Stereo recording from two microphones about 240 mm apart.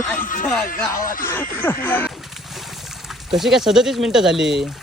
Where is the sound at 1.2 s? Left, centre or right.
Centre.